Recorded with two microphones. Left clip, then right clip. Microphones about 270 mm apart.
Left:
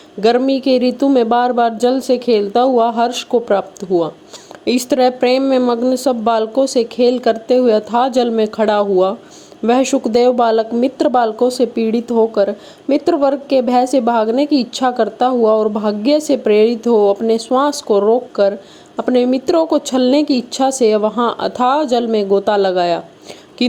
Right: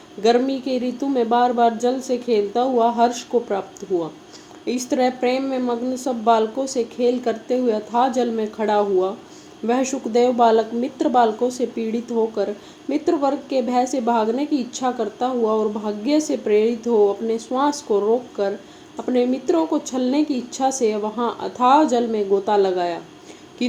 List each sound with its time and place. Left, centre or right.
0.2 s speech: left
4.6 s speech: left